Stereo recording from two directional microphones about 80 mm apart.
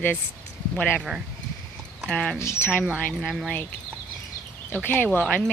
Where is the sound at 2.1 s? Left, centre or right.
Centre.